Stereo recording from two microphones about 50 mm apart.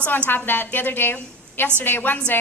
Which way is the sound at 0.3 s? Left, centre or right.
Left.